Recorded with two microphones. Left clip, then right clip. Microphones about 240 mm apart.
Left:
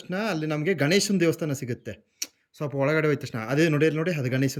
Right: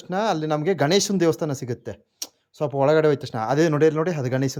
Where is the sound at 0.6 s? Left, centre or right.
Right.